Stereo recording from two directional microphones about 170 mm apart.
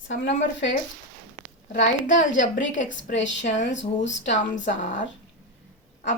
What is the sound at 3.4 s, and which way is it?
A woman's voice, 45° left (ahead or behind).